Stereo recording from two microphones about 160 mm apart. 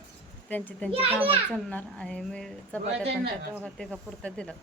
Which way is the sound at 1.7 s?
5° left (ahead or behind).